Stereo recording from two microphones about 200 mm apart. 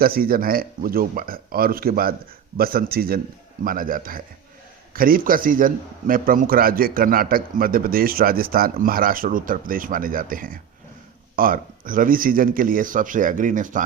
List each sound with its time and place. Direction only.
0.0 s a man's voice: 45° right (ahead or behind)